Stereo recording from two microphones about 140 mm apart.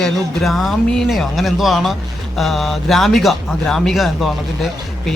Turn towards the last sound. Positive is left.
turn(degrees=0)  # may be behind; listen again after turning